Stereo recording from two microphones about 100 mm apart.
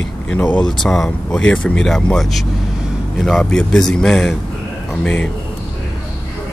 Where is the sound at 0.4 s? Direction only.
15° left (ahead or behind).